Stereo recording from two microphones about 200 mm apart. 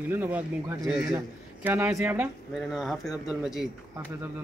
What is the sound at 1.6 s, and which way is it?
A man's voice, 10° right (ahead or behind).